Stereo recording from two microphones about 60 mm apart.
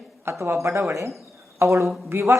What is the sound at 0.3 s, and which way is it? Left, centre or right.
Speech, right.